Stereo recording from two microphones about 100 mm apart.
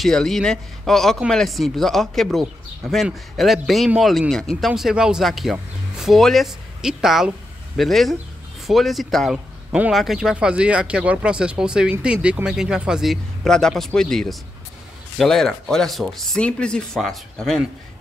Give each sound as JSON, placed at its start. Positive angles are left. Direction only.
{"t": 0.0, "sound": "speech", "side_deg": 5}